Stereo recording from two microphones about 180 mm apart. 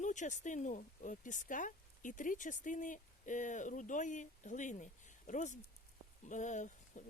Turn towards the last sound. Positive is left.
turn(degrees=45)  # may be behind; listen again after turning